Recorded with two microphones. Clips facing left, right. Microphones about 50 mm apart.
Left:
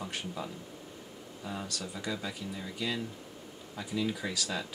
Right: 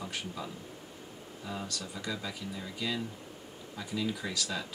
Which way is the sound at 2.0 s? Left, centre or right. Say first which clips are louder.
Left 1 dB; centre.